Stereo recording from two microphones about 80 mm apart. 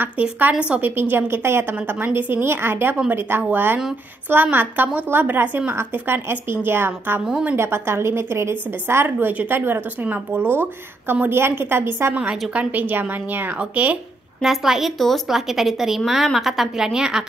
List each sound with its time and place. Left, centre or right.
0.0 s a woman's voice: right
12.1 s a woman's voice: centre
14.4 s a woman's voice: centre